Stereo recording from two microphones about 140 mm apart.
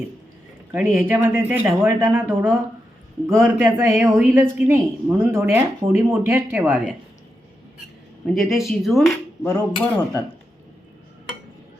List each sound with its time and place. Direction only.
0.7 s speech: 15° right (ahead or behind)
8.3 s cutlery: centre (ahead or behind)